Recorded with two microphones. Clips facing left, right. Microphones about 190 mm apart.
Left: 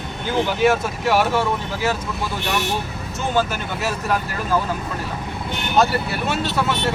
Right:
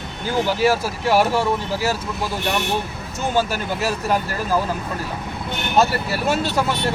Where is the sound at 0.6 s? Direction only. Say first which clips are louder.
Left 1 dB; 35° right (ahead or behind).